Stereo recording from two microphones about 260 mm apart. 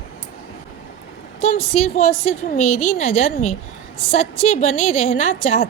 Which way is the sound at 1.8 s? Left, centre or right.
Left.